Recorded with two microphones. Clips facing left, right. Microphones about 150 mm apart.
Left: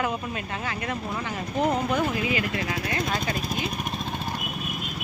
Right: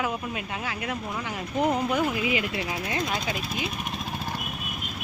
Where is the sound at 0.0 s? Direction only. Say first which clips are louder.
Left 1 dB; 10° right (ahead or behind).